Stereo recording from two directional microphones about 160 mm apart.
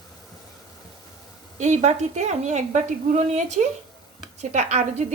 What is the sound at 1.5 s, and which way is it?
A woman's voice, 45° right (ahead or behind).